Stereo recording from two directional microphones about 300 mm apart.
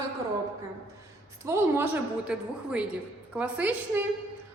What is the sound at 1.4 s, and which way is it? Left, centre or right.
A woman's voice, centre.